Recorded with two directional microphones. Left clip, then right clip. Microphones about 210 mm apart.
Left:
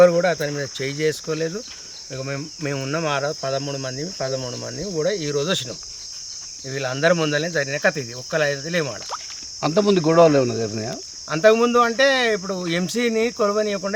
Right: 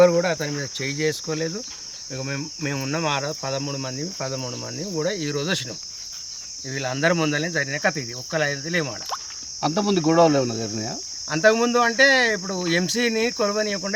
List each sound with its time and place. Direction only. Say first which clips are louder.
0.0 s cricket: left 2 dB; 10° right (ahead or behind)
6.7 s speech: left 3 dB; 5° right (ahead or behind)
9.6 s speech: left 4 dB; 30° left (ahead or behind)
11.3 s cricket: left 3 dB; 5° right (ahead or behind)